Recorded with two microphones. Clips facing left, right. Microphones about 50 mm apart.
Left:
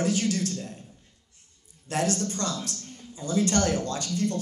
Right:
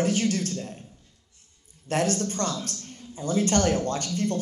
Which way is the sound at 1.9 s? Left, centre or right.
Right.